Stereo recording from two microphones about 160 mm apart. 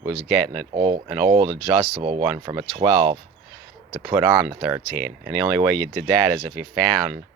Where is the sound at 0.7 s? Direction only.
40° right (ahead or behind).